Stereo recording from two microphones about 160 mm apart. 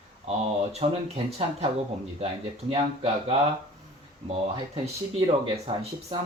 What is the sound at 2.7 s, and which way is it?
Speech, 40° right (ahead or behind).